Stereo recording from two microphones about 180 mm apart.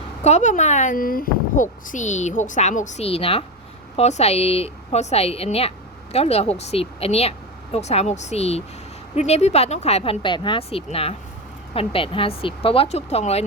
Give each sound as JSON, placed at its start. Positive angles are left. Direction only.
{"t": 0.2, "sound": "speech", "side_deg": 40}